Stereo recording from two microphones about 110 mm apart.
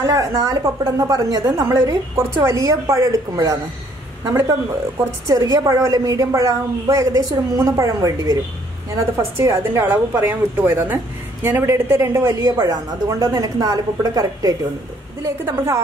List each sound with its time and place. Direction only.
0.0 s a woman's voice: 30° right (ahead or behind)